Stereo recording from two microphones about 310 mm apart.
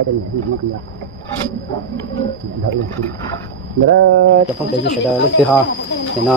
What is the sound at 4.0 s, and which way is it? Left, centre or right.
Speech, right.